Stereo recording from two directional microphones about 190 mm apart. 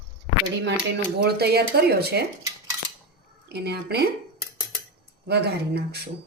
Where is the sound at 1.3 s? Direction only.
55° right (ahead or behind).